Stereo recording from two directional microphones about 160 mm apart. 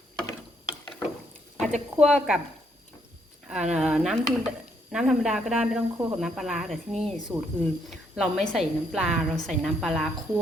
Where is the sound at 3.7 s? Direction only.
5° right (ahead or behind).